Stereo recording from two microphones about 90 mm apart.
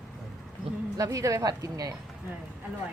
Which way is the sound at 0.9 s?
40° right (ahead or behind).